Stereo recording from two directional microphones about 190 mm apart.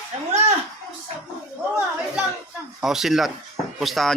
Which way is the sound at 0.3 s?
35° right (ahead or behind).